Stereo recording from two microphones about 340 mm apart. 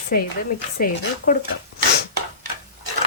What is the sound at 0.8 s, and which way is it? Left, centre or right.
Sizzle, left.